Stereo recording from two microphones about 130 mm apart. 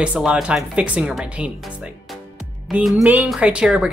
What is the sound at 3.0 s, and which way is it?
Speech, 10° right (ahead or behind).